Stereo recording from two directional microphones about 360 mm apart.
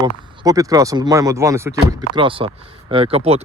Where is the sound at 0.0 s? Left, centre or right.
Centre.